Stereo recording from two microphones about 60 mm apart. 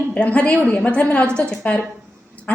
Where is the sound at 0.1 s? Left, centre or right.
Left.